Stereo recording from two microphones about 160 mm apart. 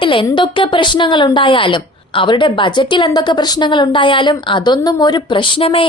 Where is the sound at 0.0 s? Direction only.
30° left (ahead or behind).